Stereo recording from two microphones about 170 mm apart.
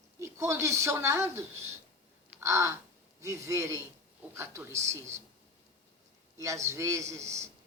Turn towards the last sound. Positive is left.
turn(degrees=-15)  # may be behind; listen again after turning